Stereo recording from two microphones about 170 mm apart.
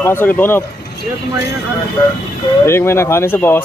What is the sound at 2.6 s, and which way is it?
Speech, 15° left (ahead or behind).